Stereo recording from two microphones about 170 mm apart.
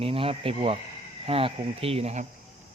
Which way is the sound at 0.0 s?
35° right (ahead or behind).